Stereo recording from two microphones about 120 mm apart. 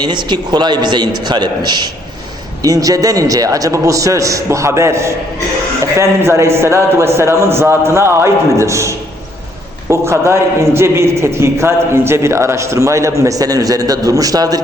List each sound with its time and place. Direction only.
0.0 s a man's voice: 40° right (ahead or behind)